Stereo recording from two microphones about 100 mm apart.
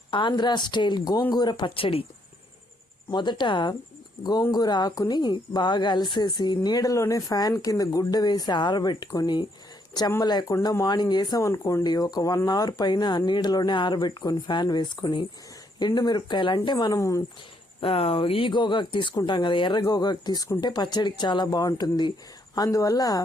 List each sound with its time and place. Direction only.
0.1 s a woman's voice: 50° left (ahead or behind); by 2.0 s 70° left (ahead or behind)
3.1 s a woman's voice: 50° left (ahead or behind)
11.4 s a woman's voice: 30° left (ahead or behind); by 16.6 s 50° left (ahead or behind)
16.7 s speech: 35° left (ahead or behind)
17.7 s a woman's voice: 70° left (ahead or behind); by 19.8 s 55° left (ahead or behind)
19.8 s a woman's voice: 40° left (ahead or behind)